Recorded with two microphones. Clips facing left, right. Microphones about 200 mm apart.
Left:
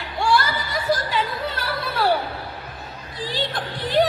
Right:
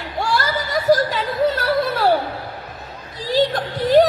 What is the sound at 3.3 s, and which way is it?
Music, 45° right (ahead or behind).